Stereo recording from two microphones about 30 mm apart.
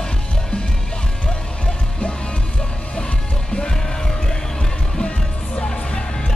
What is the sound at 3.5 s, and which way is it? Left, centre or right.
Music, left.